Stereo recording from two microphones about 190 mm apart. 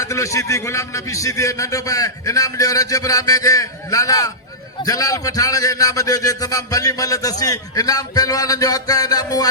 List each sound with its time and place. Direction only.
0.0 s a man's voice: 15° left (ahead or behind)